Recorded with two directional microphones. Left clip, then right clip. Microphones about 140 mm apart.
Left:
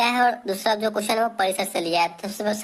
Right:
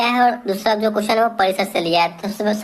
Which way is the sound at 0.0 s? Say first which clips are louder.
Right 4 dB; 35° left (ahead or behind).